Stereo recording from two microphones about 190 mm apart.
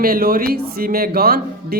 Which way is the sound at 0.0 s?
50° right (ahead or behind).